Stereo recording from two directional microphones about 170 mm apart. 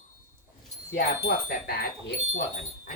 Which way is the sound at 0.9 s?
65° left (ahead or behind).